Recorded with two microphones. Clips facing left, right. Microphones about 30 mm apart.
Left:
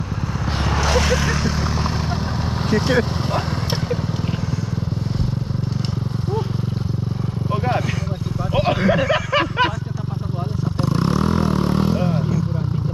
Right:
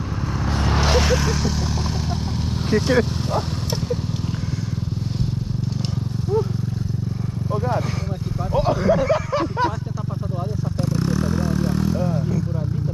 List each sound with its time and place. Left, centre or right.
0.9 s vehicle: centre
1.2 s vehicle: centre
2.7 s speech: left
8.5 s a sound: left
10.8 s vehicle: left